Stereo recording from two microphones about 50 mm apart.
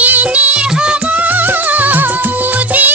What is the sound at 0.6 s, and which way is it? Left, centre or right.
Music of bollywood, centre.